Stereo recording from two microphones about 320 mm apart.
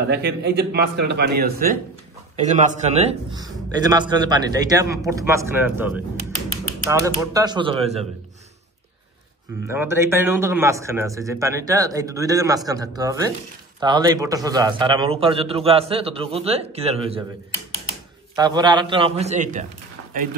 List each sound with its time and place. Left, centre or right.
0.1 s a man's voice: right
9.7 s a man's voice: centre
18.3 s a man's voice: centre